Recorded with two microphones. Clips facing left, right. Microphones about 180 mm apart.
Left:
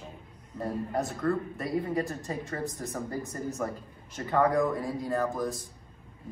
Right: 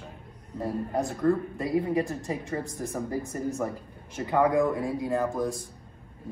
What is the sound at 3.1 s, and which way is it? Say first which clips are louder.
Speech: right 4 dB; 30° right (ahead or behind).